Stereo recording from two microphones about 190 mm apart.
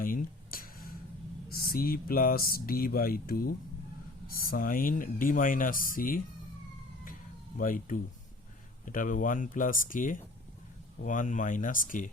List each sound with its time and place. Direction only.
0.0 s a sound: 50° left (ahead or behind)
1.6 s speech: 50° left (ahead or behind)
7.6 s speech: 45° left (ahead or behind)